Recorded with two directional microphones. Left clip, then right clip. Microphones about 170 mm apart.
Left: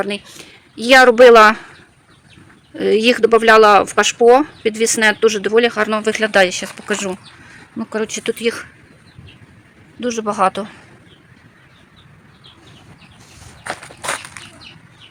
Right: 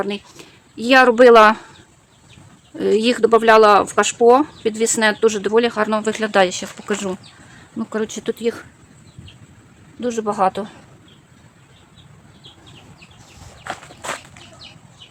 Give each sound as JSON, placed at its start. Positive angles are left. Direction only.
{"t": 0.0, "sound": "speech", "side_deg": 0}
{"t": 2.7, "sound": "speech", "side_deg": 5}
{"t": 10.0, "sound": "speech", "side_deg": 5}
{"t": 13.7, "sound": "walk", "side_deg": 65}